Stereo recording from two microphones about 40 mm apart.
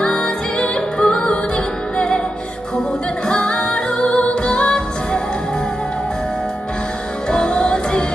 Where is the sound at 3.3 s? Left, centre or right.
Left.